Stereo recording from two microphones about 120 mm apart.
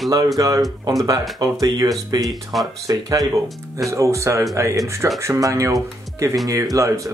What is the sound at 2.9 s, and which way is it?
Speech, 30° right (ahead or behind).